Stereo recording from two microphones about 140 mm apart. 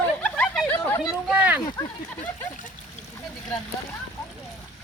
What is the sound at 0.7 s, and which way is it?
Chatter, 15° left (ahead or behind).